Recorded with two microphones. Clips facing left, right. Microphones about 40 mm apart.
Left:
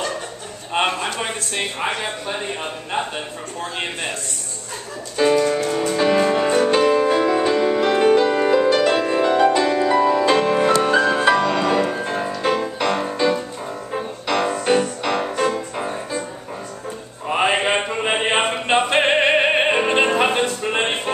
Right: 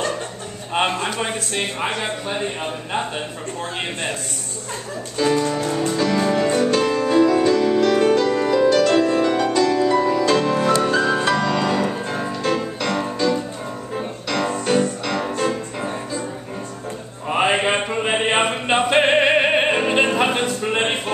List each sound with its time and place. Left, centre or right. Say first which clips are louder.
1.0 s a man's voice: right 1 dB; centre
5.1 s music: left 3 dB; left
10.2 s music: left 1 dB; centre
17.3 s chant: even; centre